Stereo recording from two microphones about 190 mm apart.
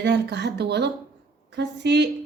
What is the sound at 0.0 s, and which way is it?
A woman's voice, 60° right (ahead or behind).